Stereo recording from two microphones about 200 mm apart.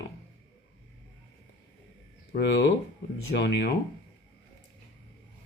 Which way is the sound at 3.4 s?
60° left (ahead or behind).